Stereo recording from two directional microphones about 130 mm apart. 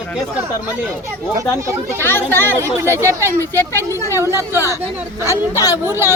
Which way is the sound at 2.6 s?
20° right (ahead or behind).